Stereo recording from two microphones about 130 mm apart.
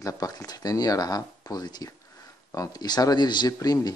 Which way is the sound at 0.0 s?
25° left (ahead or behind).